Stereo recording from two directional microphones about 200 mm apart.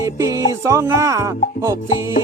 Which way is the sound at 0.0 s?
15° right (ahead or behind).